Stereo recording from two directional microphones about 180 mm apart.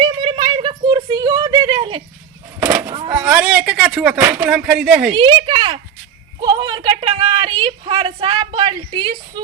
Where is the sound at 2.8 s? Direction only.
30° right (ahead or behind).